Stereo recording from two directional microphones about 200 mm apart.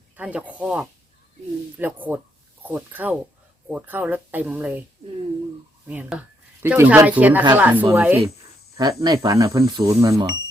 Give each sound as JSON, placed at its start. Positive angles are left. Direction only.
{"t": 0.2, "sound": "speech", "side_deg": -5}
{"t": 5.9, "sound": "speech", "side_deg": -5}